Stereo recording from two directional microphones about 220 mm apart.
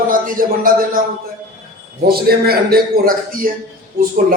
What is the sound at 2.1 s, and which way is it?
A man's voice, 45° right (ahead or behind).